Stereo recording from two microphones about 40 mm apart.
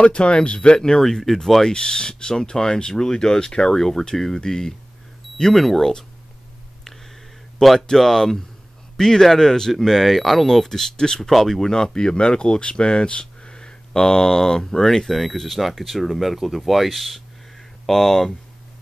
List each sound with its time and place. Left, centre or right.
0.0 s speech: left
1.0 s speech: centre
1.6 s speech: centre
7.8 s speech: centre
11.7 s speech: centre